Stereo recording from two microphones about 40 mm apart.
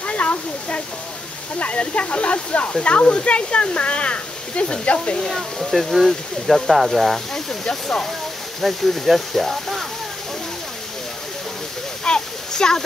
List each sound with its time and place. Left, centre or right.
0.0 s a sound: left
1.6 s speech: left
5.6 s speech: centre
7.6 s speech: centre
8.5 s speech: centre
12.0 s a sound: centre